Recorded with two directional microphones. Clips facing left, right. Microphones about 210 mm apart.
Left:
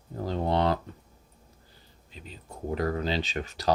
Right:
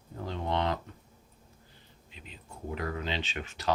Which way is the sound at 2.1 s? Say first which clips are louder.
Left 5 dB; 35° left (ahead or behind).